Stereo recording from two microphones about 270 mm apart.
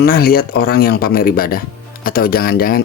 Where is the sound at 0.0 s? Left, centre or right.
Left.